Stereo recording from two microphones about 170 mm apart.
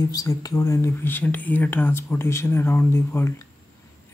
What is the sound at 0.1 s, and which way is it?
Speech, 20° left (ahead or behind).